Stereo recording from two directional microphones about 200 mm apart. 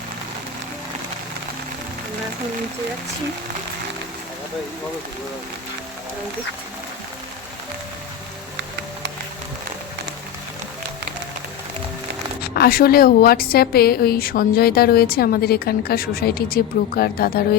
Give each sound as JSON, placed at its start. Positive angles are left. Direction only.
{"t": 12.4, "sound": "a woman's voice", "side_deg": 50}